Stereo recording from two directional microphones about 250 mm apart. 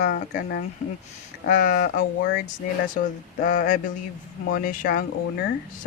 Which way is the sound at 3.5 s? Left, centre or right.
Left.